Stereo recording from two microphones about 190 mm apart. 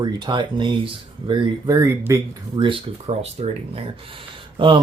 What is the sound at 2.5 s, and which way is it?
Speech, 25° right (ahead or behind).